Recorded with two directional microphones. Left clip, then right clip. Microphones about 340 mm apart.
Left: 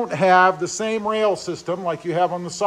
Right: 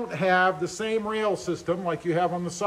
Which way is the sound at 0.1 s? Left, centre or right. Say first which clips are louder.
Left 7 dB; left.